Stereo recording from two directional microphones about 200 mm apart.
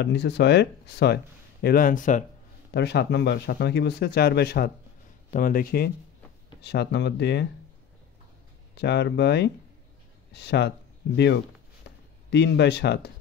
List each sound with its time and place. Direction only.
0.0 s speech: 60° left (ahead or behind); by 2.2 s 40° left (ahead or behind)
2.7 s speech: 55° left (ahead or behind)
8.7 s speech: 55° left (ahead or behind)
12.3 s speech: 60° left (ahead or behind)